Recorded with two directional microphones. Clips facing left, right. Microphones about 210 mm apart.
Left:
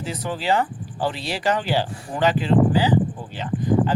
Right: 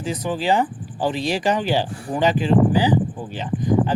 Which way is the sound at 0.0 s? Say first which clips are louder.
Right 3 dB; 15° right (ahead or behind).